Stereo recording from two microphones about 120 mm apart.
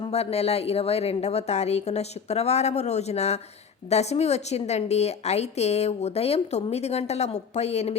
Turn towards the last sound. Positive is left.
turn(degrees=65)  # may be behind; listen again after turning